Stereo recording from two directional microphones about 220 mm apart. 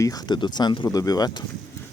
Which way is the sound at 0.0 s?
15° left (ahead or behind).